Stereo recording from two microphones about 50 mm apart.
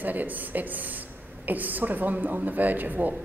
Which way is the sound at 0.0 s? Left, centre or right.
Right.